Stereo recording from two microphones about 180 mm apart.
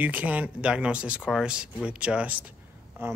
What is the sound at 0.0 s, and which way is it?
Speech, 10° right (ahead or behind).